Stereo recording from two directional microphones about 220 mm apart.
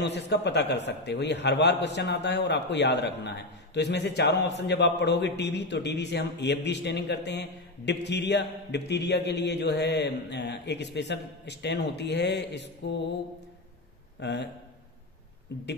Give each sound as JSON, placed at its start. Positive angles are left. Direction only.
{"t": 0.0, "sound": "a man's voice", "side_deg": 50}
{"t": 14.2, "sound": "a man's voice", "side_deg": 50}
{"t": 15.5, "sound": "a man's voice", "side_deg": 50}